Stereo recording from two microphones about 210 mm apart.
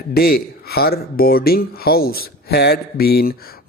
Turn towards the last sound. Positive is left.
turn(degrees=50)  # may be behind; listen again after turning